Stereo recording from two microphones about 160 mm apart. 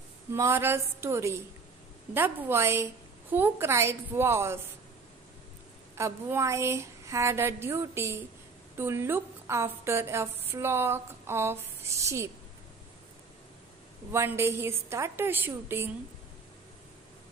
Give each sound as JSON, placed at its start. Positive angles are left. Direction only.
{"t": 0.3, "sound": "a woman's voice", "side_deg": -15}
{"t": 5.9, "sound": "a woman's voice", "side_deg": -15}
{"t": 14.1, "sound": "a woman's voice", "side_deg": -15}